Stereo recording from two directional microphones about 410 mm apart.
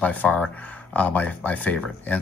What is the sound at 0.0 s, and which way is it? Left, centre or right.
Speech, centre.